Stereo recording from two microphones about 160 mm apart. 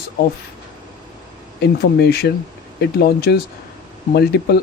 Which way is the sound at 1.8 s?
75° left (ahead or behind).